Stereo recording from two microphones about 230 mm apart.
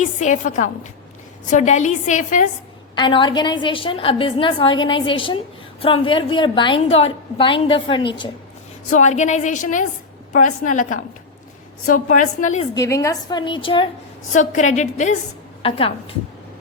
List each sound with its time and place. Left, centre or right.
0.0 s a woman's voice: left
2.9 s a woman's voice: left
8.9 s a woman's voice: left
12.7 s a woman's voice: centre
14.3 s a woman's voice: left